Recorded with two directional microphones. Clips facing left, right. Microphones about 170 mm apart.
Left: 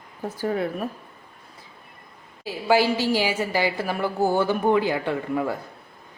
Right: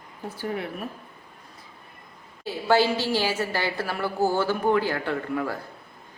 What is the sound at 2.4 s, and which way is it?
A woman's voice, 10° left (ahead or behind).